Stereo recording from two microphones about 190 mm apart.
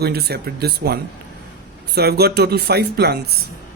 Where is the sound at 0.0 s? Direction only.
55° right (ahead or behind).